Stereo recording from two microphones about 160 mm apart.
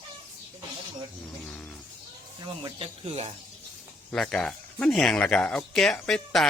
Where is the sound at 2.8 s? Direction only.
35° right (ahead or behind).